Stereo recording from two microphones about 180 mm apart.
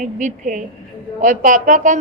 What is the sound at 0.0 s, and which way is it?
A woman's voice, 45° right (ahead or behind).